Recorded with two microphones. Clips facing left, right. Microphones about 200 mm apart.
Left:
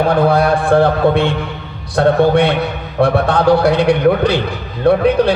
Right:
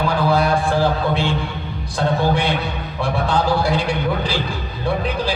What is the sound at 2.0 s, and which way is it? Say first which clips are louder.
A man's voice: left 8 dB; 60° left (ahead or behind).